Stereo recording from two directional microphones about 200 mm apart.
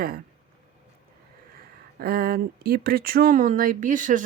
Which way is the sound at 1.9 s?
50° right (ahead or behind).